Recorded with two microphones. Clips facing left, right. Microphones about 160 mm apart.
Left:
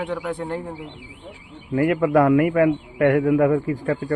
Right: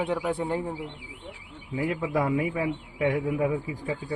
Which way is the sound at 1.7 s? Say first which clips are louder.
Left 10 dB; 70° left (ahead or behind).